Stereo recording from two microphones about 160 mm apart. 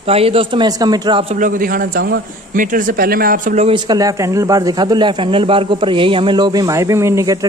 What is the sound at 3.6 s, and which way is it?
A man's voice, 30° right (ahead or behind).